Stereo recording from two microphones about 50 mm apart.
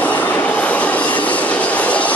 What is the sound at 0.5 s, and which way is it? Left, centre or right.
Train, left.